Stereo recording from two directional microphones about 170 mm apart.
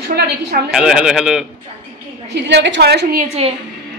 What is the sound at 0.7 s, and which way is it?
Speech, 5° right (ahead or behind).